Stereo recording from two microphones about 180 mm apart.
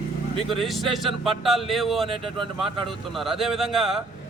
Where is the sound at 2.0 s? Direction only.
30° right (ahead or behind).